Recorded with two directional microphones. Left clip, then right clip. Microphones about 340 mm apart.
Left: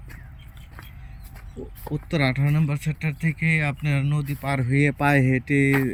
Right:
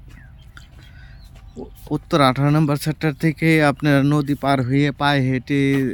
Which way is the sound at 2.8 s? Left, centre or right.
Centre.